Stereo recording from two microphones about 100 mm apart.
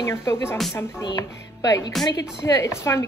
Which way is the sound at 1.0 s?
45° left (ahead or behind).